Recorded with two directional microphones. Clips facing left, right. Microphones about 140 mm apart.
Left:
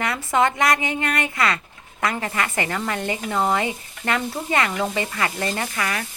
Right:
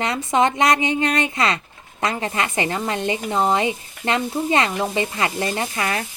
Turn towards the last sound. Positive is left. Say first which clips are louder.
# right 2 dB
turn(degrees=-25)  # may be behind; listen again after turning